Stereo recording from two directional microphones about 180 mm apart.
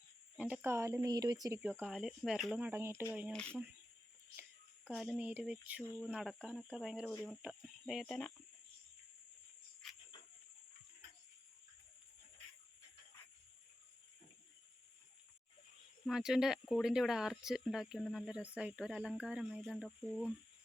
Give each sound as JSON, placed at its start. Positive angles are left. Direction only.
{"t": 0.3, "sound": "speech", "side_deg": -10}
{"t": 3.3, "sound": "speech", "side_deg": 5}
{"t": 4.9, "sound": "speech", "side_deg": 0}
{"t": 16.0, "sound": "speech", "side_deg": -5}